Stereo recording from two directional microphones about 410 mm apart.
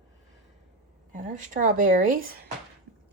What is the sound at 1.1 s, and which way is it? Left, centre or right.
A woman's voice, centre.